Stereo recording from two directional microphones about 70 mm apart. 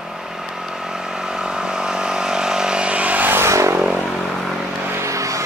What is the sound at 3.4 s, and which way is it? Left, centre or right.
Vehicle, right.